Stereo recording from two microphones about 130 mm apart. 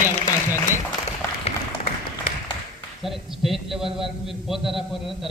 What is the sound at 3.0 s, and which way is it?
A man's voice, centre (ahead or behind).